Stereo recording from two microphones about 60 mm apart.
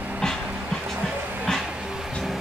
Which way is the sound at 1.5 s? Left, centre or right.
Centre.